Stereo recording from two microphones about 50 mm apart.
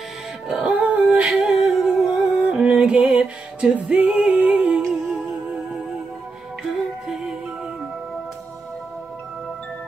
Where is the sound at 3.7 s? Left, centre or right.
Right.